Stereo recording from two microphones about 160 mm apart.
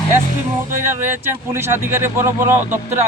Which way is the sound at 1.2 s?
15° right (ahead or behind).